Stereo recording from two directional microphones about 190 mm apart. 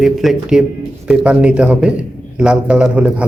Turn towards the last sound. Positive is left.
turn(degrees=-5)  # may be behind; listen again after turning